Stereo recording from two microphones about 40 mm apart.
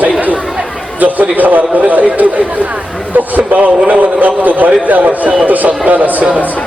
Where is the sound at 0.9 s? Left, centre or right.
Right.